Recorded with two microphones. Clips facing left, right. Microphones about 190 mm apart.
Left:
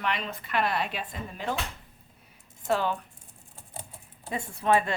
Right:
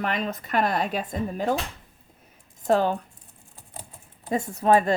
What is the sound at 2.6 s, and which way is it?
Speech, 40° right (ahead or behind).